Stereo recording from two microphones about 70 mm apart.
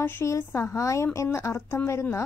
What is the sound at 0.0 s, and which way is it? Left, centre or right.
A woman's voice, left.